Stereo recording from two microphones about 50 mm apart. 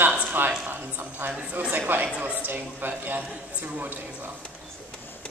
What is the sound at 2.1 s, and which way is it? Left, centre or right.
A child's voice, right.